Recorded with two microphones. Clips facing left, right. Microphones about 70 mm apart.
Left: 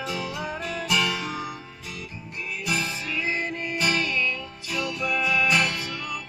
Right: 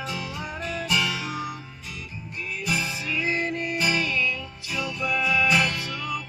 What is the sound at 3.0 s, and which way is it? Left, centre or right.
Music, left.